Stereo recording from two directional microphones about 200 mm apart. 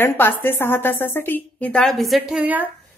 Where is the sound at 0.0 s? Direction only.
10° left (ahead or behind); by 2.7 s 10° right (ahead or behind).